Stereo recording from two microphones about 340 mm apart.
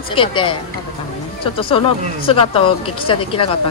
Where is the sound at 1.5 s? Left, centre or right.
Centre.